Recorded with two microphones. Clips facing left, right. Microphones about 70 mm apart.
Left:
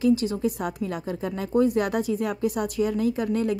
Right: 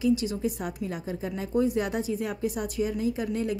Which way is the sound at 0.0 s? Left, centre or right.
Left.